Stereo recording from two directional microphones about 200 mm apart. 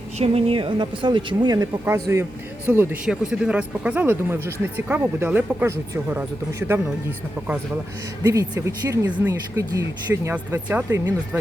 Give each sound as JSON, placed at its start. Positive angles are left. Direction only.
{"t": 0.2, "sound": "a woman's voice", "side_deg": -30}
{"t": 8.2, "sound": "speech", "side_deg": -15}